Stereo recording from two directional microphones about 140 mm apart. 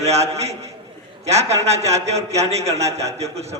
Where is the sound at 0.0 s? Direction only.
50° right (ahead or behind).